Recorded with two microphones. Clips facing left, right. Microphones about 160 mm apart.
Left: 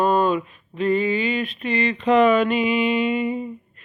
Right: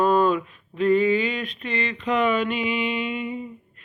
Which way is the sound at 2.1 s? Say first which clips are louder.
Left 6 dB; 45° left (ahead or behind).